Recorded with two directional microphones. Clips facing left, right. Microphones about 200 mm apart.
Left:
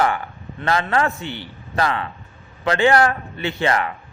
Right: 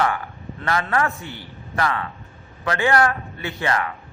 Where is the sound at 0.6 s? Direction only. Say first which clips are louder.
Left 2 dB; 25° left (ahead or behind).